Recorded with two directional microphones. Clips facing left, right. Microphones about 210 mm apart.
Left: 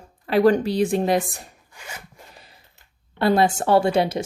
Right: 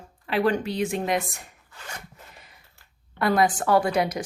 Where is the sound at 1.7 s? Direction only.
10° left (ahead or behind).